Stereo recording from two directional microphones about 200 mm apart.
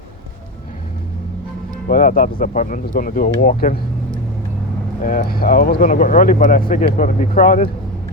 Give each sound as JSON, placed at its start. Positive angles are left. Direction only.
{"t": 1.9, "sound": "speech", "side_deg": 45}
{"t": 5.0, "sound": "speech", "side_deg": 45}